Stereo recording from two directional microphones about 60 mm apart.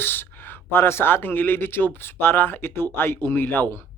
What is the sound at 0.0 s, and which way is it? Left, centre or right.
Speech, left.